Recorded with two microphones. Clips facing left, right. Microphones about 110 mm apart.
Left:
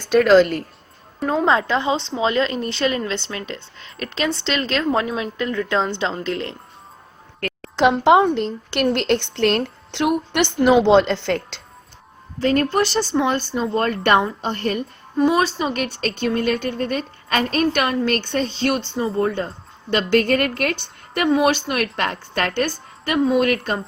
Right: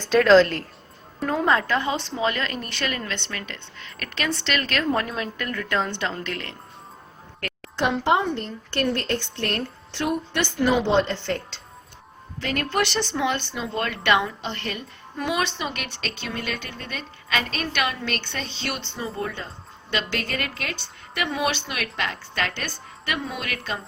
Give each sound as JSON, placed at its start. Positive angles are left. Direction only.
{"t": 0.0, "sound": "a woman's voice", "side_deg": 10}
{"t": 1.5, "sound": "a woman's voice", "side_deg": 25}
{"t": 7.8, "sound": "a sound", "side_deg": 70}
{"t": 8.7, "sound": "a woman's voice", "side_deg": 75}
{"t": 12.4, "sound": "a woman's voice", "side_deg": 35}
{"t": 18.9, "sound": "a woman's voice", "side_deg": 30}
{"t": 19.2, "sound": "a woman's voice", "side_deg": 50}